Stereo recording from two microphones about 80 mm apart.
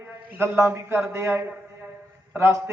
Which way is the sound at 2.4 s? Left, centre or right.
Right.